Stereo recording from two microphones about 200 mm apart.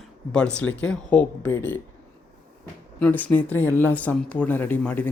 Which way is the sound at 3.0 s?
10° left (ahead or behind).